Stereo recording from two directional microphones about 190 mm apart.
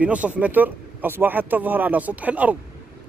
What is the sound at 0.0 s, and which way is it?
Speech, 5° right (ahead or behind).